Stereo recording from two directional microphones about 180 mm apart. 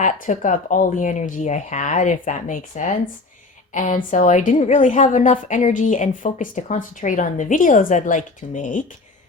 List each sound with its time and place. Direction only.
0.0 s a woman's voice: 45° left (ahead or behind)